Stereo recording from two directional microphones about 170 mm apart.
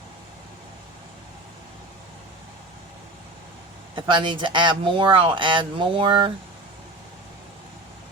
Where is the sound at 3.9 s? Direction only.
30° right (ahead or behind).